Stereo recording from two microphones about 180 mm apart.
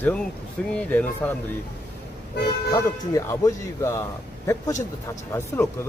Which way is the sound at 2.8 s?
15° left (ahead or behind).